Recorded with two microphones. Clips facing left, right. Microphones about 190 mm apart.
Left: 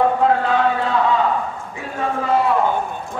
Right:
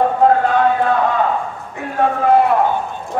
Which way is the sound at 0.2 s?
50° right (ahead or behind).